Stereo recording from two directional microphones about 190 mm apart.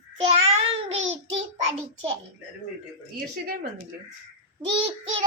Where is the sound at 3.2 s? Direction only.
50° right (ahead or behind).